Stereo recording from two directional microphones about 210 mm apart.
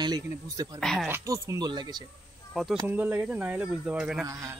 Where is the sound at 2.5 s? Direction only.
Centre (ahead or behind).